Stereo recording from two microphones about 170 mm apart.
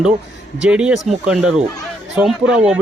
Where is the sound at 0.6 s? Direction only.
5° right (ahead or behind).